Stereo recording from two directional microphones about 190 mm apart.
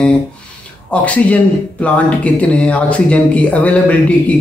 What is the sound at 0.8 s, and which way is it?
Speech, 5° left (ahead or behind).